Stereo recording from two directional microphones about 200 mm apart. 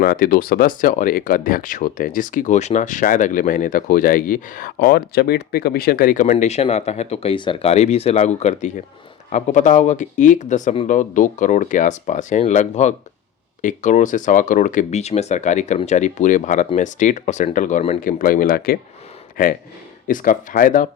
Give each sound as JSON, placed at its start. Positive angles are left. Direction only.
{"t": 0.0, "sound": "speech", "side_deg": 50}
{"t": 18.0, "sound": "speech", "side_deg": 45}